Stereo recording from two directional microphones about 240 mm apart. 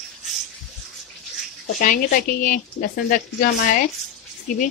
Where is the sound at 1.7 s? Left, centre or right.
Left.